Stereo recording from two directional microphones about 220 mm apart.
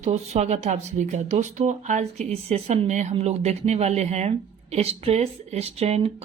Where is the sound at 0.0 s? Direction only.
30° right (ahead or behind).